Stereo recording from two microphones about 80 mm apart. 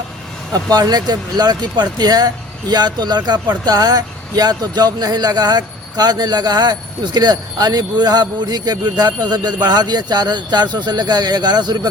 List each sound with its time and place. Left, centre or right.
0.5 s speech: right